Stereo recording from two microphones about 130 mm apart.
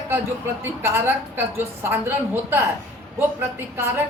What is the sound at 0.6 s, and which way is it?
A woman's voice, 20° right (ahead or behind).